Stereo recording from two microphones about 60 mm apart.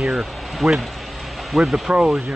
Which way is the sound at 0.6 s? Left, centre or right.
Centre.